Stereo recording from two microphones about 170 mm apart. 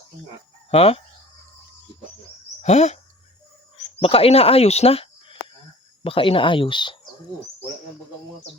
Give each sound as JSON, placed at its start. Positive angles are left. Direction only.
{"t": 0.7, "sound": "speech", "side_deg": 35}
{"t": 2.6, "sound": "speech", "side_deg": 40}